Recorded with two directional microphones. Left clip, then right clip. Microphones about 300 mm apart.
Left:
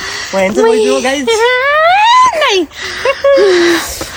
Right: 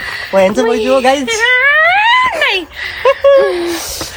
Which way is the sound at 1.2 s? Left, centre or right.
Centre.